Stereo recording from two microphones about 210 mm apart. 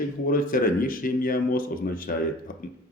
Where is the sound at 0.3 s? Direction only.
40° left (ahead or behind).